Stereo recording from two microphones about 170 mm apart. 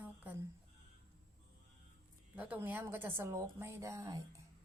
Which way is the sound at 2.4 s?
10° right (ahead or behind).